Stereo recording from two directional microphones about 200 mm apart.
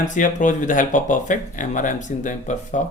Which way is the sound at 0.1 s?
40° left (ahead or behind).